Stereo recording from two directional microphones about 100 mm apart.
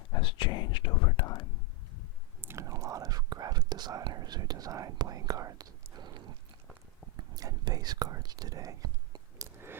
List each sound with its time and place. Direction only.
0.2 s whispering: 55° left (ahead or behind)
2.4 s whispering: 25° right (ahead or behind)
7.2 s whispering: 40° right (ahead or behind)